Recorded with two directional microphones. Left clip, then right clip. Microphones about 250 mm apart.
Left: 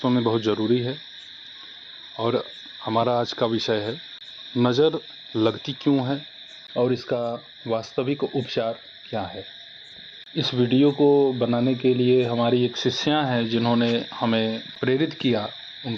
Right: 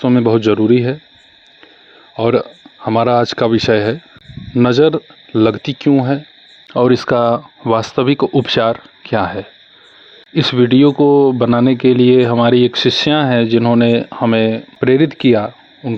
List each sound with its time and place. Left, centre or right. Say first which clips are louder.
0.0 s speech: right 10 dB; right
2.1 s speech: right 11 dB; right